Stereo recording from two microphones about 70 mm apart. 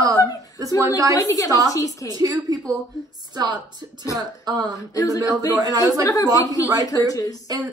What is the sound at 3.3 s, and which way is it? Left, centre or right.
Speech, right.